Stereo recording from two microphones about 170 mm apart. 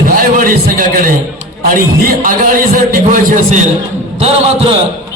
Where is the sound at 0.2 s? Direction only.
55° right (ahead or behind).